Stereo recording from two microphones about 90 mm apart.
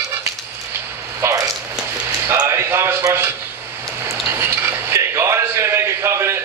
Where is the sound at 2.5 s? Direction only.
25° right (ahead or behind).